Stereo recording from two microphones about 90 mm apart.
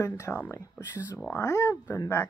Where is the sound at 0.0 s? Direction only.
30° left (ahead or behind).